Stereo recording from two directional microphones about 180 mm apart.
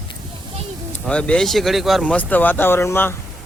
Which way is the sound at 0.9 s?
5° left (ahead or behind).